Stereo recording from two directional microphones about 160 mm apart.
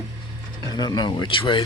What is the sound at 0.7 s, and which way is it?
Speech, 25° left (ahead or behind).